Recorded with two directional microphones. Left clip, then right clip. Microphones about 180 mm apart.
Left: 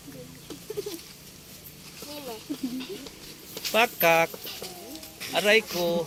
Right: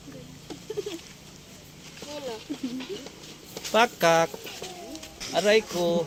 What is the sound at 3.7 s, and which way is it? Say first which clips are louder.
Speech: right 1 dB; 35° right (ahead or behind).